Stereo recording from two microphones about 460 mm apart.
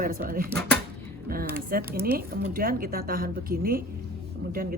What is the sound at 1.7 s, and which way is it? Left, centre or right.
Speech, centre.